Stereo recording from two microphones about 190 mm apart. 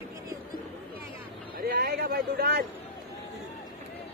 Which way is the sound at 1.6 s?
55° right (ahead or behind).